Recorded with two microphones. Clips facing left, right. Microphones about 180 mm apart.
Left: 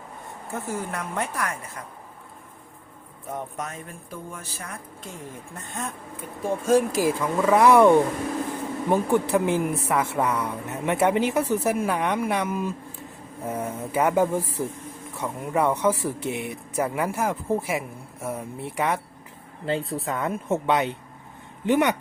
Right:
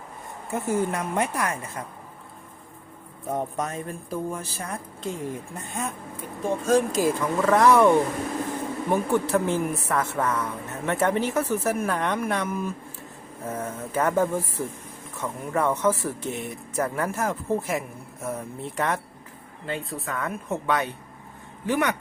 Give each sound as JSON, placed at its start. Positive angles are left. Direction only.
{"t": 0.5, "sound": "a woman's voice", "side_deg": -20}
{"t": 3.3, "sound": "speech", "side_deg": -35}
{"t": 5.8, "sound": "speech", "side_deg": -10}
{"t": 6.4, "sound": "a woman's voice", "side_deg": 10}
{"t": 19.6, "sound": "speech", "side_deg": 30}